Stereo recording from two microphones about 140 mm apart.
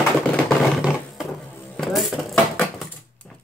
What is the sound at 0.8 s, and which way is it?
Roar, 5° right (ahead or behind).